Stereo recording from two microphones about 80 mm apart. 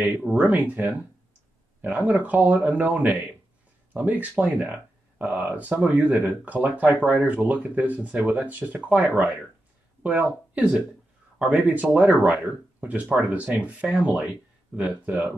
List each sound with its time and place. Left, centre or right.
0.0 s speech: centre
10.5 s speech: centre